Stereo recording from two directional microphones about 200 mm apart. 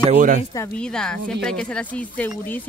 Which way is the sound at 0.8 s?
5° left (ahead or behind).